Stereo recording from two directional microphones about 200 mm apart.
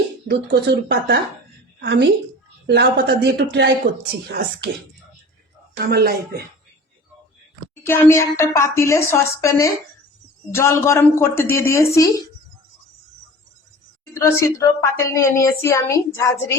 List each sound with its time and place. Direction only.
0.3 s speech: 60° right (ahead or behind)
5.8 s speech: 50° right (ahead or behind)
7.9 s a woman's voice: 10° left (ahead or behind)
14.1 s a woman's voice: 15° left (ahead or behind)